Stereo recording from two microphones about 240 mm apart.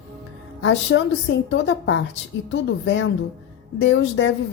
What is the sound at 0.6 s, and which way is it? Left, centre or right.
Speech, left.